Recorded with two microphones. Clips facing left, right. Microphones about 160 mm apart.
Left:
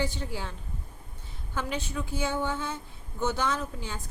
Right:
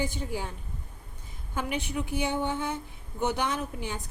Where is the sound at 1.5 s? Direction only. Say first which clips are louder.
Right 1 dB; 15° right (ahead or behind).